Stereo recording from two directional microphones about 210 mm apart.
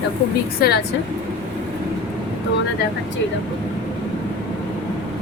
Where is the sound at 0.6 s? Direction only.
45° left (ahead or behind).